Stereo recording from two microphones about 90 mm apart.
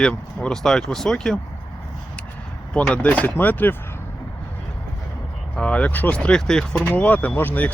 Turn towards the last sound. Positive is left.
turn(degrees=20)  # may be behind; listen again after turning